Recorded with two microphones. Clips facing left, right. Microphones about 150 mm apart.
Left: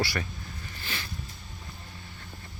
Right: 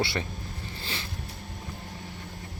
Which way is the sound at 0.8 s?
30° right (ahead or behind).